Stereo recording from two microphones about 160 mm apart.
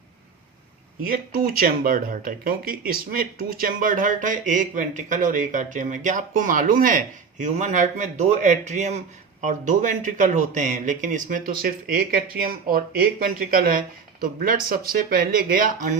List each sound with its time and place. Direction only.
1.0 s speech: 65° right (ahead or behind)